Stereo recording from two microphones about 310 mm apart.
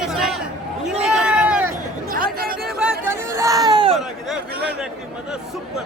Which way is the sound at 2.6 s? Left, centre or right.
Centre.